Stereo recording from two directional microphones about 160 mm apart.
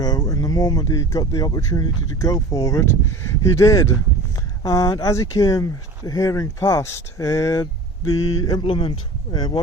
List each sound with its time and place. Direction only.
0.0 s speech: 25° left (ahead or behind)
8.6 s speech: 30° left (ahead or behind)